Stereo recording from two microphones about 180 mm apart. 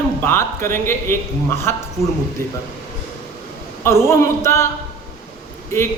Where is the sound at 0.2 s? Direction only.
15° left (ahead or behind).